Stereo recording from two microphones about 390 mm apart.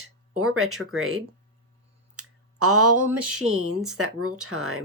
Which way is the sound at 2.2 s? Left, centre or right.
Right.